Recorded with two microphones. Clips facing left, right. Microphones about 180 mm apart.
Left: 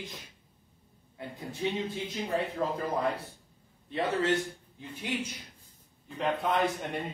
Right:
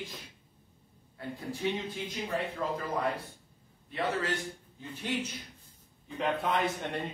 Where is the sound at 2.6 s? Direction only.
25° left (ahead or behind).